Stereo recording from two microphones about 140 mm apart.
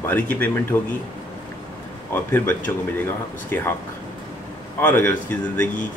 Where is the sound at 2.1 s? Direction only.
15° left (ahead or behind).